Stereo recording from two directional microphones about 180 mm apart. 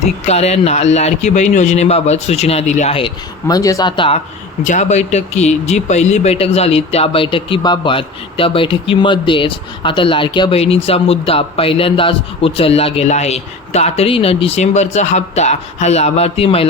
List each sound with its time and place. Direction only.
0.3 s speech: 35° left (ahead or behind)
3.4 s speech: 20° left (ahead or behind)
4.6 s speech: 40° left (ahead or behind)